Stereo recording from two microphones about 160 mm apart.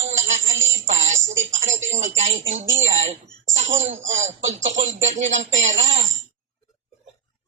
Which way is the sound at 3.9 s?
45° right (ahead or behind).